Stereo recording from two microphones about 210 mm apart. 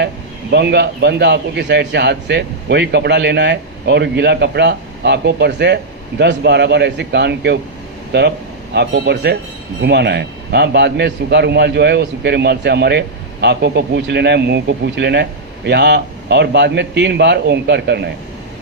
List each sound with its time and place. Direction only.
0.5 s a man's voice: 55° right (ahead or behind)
8.7 s a man's voice: 55° right (ahead or behind)